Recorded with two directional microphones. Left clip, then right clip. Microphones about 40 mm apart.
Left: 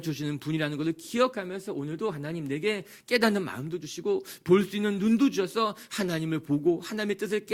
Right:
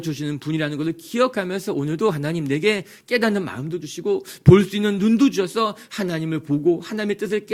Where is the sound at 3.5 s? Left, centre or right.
Left.